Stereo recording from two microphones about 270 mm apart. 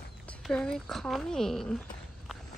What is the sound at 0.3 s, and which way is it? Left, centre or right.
Speech, centre.